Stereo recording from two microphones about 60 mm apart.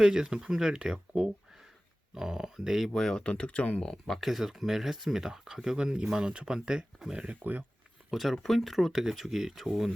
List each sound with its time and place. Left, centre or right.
0.0 s speech: centre
2.9 s speech: centre
4.2 s speech: centre
8.1 s speech: centre